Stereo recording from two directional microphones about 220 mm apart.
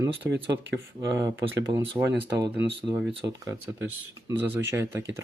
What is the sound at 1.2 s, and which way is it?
Speech, 55° right (ahead or behind).